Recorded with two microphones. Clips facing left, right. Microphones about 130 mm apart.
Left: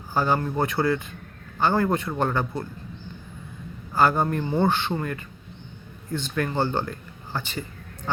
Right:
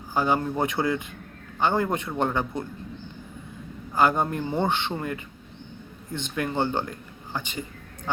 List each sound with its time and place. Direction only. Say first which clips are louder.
0.1 s a man's voice: even; 15° right (ahead or behind)
3.9 s a man's voice: left 1 dB; 15° right (ahead or behind)